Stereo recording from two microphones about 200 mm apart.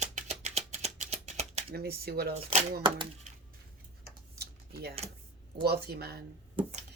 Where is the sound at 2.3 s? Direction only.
25° right (ahead or behind).